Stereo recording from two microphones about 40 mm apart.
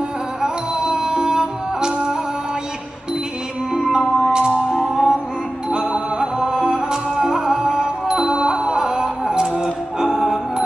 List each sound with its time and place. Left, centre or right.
0.4 s music: centre
3.7 s music: centre
5.7 s music: centre